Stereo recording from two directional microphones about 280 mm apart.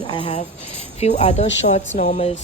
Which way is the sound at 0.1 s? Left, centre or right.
Centre.